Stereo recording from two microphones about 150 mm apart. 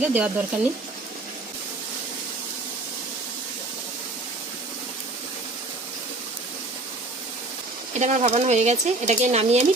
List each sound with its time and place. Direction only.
0.0 s speech: 10° right (ahead or behind)
7.9 s speech: 50° right (ahead or behind)